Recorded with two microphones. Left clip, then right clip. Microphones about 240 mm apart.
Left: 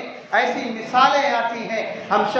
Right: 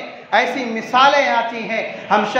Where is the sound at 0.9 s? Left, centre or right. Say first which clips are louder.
Right 3 dB; right.